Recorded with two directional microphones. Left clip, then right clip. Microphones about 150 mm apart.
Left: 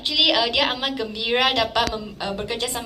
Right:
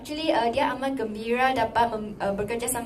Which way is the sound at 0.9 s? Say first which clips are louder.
Left 4 dB; 50° right (ahead or behind).